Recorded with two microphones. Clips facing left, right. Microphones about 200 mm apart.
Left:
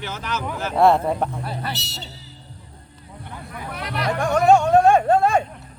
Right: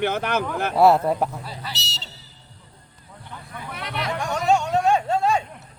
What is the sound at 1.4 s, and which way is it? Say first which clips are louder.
Speech: left 6 dB; 60° left (ahead or behind).